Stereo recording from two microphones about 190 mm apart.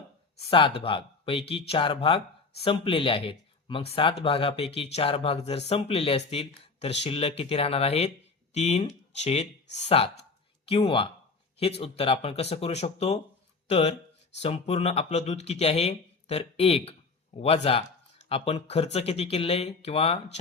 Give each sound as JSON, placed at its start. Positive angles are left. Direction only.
{"t": 0.4, "sound": "speech", "side_deg": 25}